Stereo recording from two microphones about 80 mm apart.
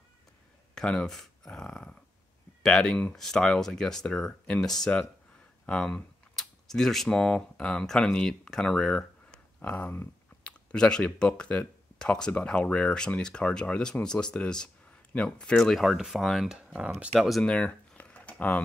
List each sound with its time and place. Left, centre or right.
0.7 s speech: centre
9.6 s speech: centre
16.4 s speech: centre
17.1 s speech: centre